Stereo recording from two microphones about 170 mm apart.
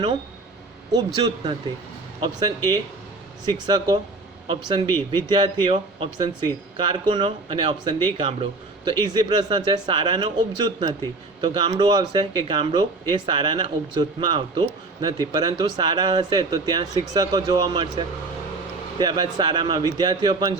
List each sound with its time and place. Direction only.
0.9 s speech: 30° right (ahead or behind)
3.4 s speech: 25° right (ahead or behind)